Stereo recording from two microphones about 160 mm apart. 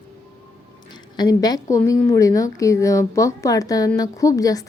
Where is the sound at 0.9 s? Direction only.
25° left (ahead or behind).